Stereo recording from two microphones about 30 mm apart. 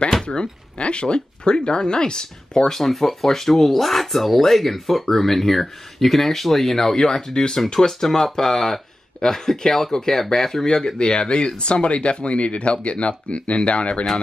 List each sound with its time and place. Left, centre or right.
0.1 s a sound: centre
0.4 s speech: left
2.7 s speech: centre
11.0 s speech: left